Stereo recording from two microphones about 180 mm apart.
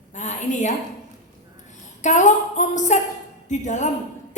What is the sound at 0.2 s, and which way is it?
Speech, 40° left (ahead or behind).